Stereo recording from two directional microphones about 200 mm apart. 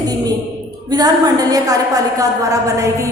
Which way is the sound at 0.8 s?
20° right (ahead or behind).